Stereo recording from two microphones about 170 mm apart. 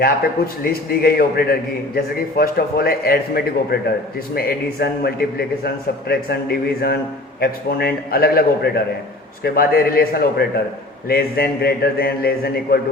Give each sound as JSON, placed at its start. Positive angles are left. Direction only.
{"t": 0.6, "sound": "a man's voice", "side_deg": 65}